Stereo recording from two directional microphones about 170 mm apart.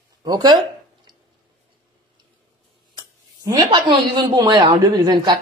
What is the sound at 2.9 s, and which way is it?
Speech, 25° right (ahead or behind).